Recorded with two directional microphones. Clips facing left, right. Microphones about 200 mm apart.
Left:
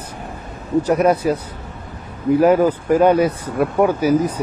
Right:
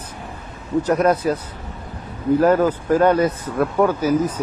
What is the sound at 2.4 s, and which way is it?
Speech, 10° left (ahead or behind).